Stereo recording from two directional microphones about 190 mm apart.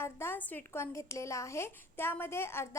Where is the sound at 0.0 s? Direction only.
10° left (ahead or behind).